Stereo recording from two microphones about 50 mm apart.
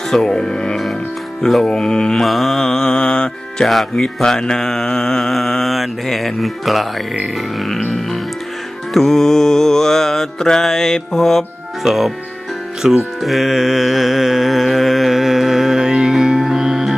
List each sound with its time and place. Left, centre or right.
0.1 s mantra: centre
1.5 s music: centre
1.7 s mantra: centre
2.2 s mantra: centre
3.7 s mantra: centre
7.3 s music: centre
8.9 s mantra: centre
11.8 s music: centre
12.8 s carnatic music: centre